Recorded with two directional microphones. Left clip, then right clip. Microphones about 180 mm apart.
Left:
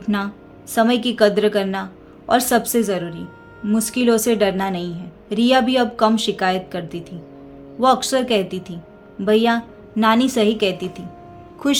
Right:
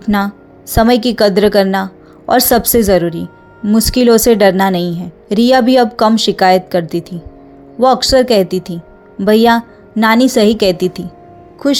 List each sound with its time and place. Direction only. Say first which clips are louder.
0.0 s a woman's voice: right 8 dB; 40° right (ahead or behind)
11.6 s speech: right 6 dB; 25° right (ahead or behind)